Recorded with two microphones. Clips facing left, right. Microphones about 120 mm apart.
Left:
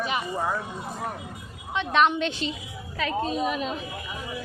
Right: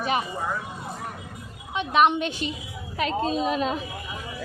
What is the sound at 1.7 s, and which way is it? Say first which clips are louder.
Speech: right 2 dB; 10° right (ahead or behind).